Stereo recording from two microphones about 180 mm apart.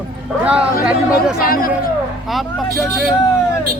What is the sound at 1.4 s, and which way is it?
Speech, 55° left (ahead or behind).